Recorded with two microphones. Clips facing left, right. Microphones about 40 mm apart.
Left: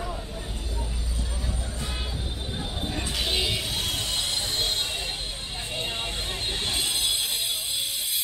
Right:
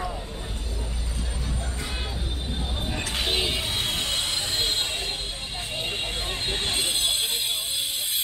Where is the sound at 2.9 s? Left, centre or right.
Right.